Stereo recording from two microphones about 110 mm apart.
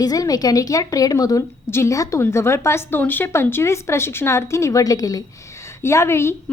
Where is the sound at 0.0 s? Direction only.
35° left (ahead or behind).